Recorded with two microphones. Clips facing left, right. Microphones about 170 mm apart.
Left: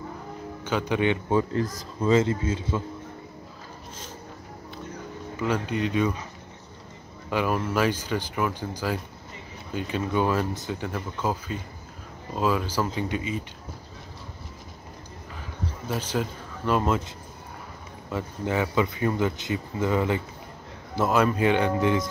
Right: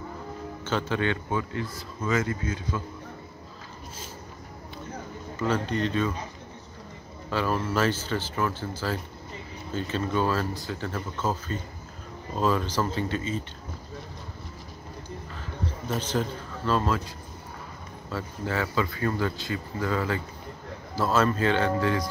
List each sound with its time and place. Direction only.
0.7 s speech: 15° left (ahead or behind)
1.3 s a man's voice: 40° left (ahead or behind)
5.4 s speech: 10° left (ahead or behind)
7.2 s speech: 15° left (ahead or behind)
15.9 s speech: 10° left (ahead or behind)
18.1 s speech: 20° left (ahead or behind)